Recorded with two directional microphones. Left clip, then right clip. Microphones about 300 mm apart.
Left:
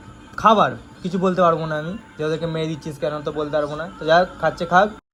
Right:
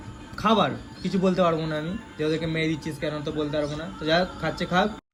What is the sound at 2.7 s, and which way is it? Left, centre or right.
Speech, centre.